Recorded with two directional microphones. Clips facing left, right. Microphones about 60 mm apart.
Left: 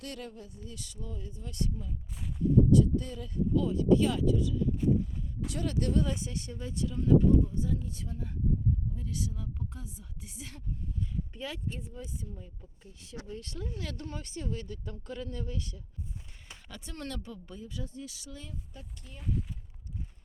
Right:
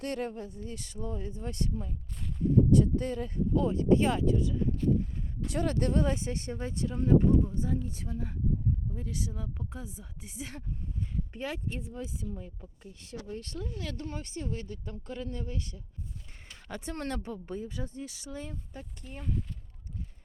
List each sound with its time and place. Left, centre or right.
0.0 s speech: right
11.3 s speech: right
11.8 s speech: right
12.9 s speech: right
13.2 s speech: right
13.8 s speech: right
19.2 s speech: centre